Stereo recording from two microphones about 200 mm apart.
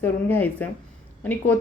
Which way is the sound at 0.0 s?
10° left (ahead or behind).